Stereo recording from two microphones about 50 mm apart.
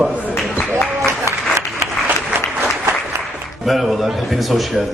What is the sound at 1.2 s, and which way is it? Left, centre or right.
Applause, right.